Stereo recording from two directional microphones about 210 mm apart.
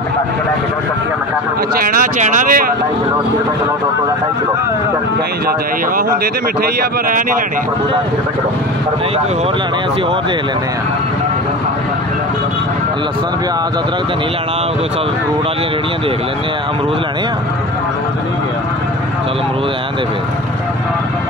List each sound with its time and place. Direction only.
1.8 s speech: 40° right (ahead or behind)
7.1 s speech: 40° right (ahead or behind)